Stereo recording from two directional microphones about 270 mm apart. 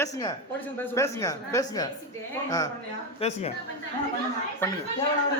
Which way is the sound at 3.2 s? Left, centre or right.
Left.